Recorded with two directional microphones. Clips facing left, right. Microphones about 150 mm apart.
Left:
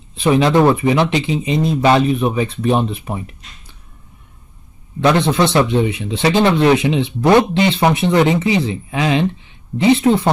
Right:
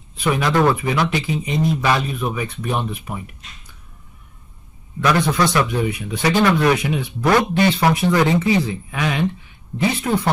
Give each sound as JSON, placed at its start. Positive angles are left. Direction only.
{"t": 0.1, "sound": "a man's voice", "side_deg": 25}
{"t": 5.0, "sound": "a man's voice", "side_deg": 25}